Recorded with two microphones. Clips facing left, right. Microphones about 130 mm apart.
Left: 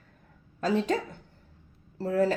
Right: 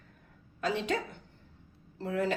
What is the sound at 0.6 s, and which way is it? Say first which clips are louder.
Speech: left 5 dB; 35° left (ahead or behind).